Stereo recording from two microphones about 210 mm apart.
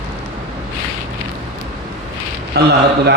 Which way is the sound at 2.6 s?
50° right (ahead or behind).